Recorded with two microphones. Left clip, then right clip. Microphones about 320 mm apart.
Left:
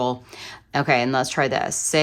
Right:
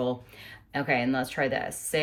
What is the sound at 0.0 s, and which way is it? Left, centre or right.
Speech, centre.